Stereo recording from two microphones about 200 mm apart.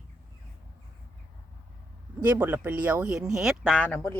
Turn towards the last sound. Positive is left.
turn(degrees=5)  # may be behind; listen again after turning